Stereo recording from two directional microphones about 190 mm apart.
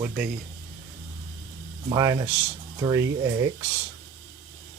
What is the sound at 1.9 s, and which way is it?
Speech, 20° right (ahead or behind).